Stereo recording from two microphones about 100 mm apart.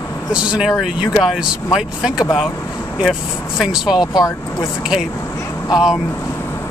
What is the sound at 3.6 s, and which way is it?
Speech, 5° right (ahead or behind).